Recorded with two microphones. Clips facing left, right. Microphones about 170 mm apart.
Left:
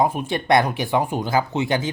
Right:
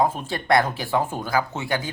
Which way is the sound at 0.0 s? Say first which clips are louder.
Left 2 dB; 15° left (ahead or behind).